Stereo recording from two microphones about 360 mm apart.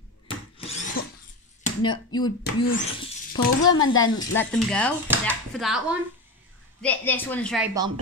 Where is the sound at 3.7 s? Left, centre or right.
Left.